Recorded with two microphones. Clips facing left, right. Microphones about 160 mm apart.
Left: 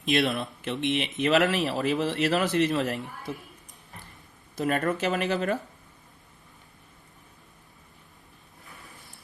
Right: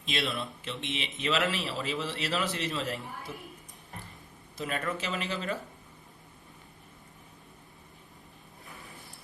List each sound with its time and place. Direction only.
0.0 s speech: 55° left (ahead or behind)
4.5 s speech: 50° left (ahead or behind)